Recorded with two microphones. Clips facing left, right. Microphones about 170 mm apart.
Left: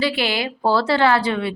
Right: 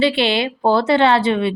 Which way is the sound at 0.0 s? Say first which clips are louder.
Right 5 dB; 25° right (ahead or behind).